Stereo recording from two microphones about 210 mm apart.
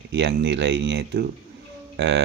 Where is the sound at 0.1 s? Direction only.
55° right (ahead or behind).